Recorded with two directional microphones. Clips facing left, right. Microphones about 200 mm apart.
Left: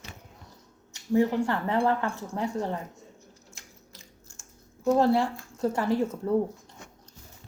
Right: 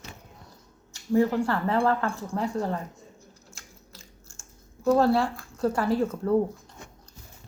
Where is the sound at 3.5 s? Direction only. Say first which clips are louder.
Right 1 dB; 20° left (ahead or behind).